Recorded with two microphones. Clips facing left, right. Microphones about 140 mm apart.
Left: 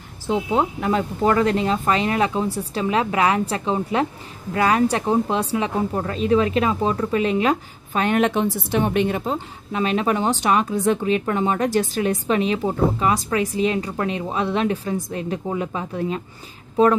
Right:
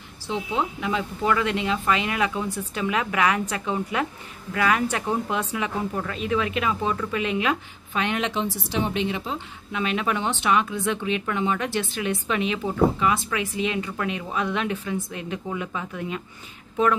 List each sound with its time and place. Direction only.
0.3 s speech: 45° left (ahead or behind)